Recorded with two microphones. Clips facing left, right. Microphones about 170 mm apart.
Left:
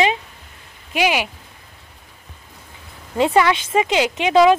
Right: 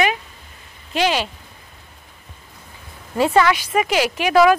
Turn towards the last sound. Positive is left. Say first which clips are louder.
# left 1 dB
turn(degrees=20)  # may be behind; listen again after turning